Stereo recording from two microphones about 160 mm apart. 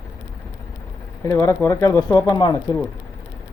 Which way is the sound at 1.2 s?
20° left (ahead or behind).